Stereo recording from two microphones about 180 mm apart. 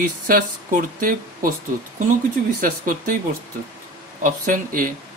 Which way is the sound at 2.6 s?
50° right (ahead or behind).